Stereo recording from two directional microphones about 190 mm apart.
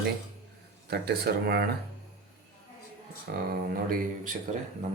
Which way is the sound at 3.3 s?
55° right (ahead or behind).